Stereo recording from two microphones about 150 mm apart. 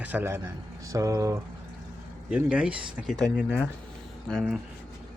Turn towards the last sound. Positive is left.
turn(degrees=0)  # may be behind; listen again after turning